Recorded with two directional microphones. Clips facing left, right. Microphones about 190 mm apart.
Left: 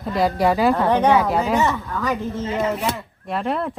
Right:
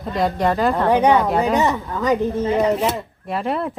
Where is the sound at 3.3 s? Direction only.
Centre (ahead or behind).